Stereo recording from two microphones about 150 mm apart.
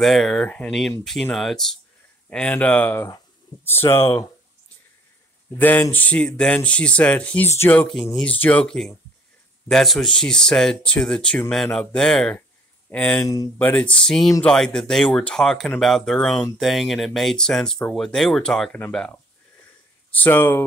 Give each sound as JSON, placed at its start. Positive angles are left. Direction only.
{"t": 0.0, "sound": "speech", "side_deg": 0}
{"t": 3.9, "sound": "speech", "side_deg": 35}
{"t": 5.6, "sound": "speech", "side_deg": 10}
{"t": 13.2, "sound": "speech", "side_deg": 25}
{"t": 13.6, "sound": "speech", "side_deg": 10}